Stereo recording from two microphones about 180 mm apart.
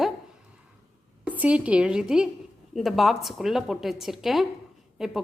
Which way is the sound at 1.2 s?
10° right (ahead or behind).